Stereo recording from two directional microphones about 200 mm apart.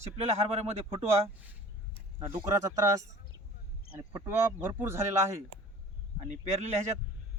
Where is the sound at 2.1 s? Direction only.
20° right (ahead or behind).